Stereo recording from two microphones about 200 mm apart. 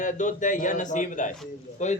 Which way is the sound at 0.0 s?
40° left (ahead or behind).